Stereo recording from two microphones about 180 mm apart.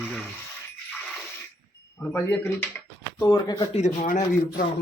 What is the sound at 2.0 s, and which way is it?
Speech, 10° left (ahead or behind).